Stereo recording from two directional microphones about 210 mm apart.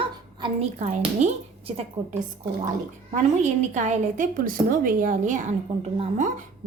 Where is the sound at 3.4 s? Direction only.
35° right (ahead or behind).